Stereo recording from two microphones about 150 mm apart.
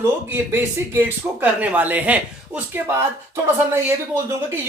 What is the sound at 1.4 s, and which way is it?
Speech, 10° right (ahead or behind).